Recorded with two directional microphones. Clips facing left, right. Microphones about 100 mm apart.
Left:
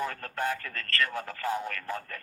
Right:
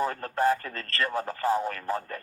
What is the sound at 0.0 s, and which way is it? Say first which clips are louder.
Speech: right 6 dB; 30° right (ahead or behind).